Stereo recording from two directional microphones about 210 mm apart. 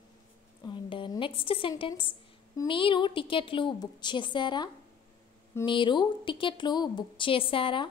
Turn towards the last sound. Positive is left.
turn(degrees=25)  # may be behind; listen again after turning